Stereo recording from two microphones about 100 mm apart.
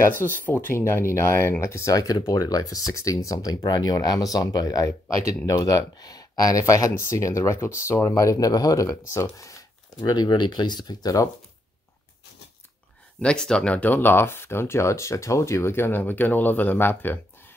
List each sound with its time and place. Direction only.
0.2 s speech: 20° left (ahead or behind)
9.9 s speech: 45° left (ahead or behind)
13.2 s speech: 10° left (ahead or behind)